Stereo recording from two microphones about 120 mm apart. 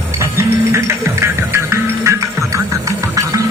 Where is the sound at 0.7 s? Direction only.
20° right (ahead or behind).